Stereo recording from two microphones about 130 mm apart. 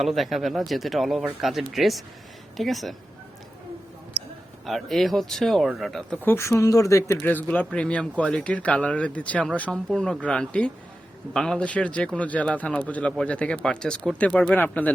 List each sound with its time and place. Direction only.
0.0 s speech: centre (ahead or behind)
4.6 s speech: centre (ahead or behind)
6.2 s speech: 20° left (ahead or behind)
7.2 s a man's voice: 10° left (ahead or behind)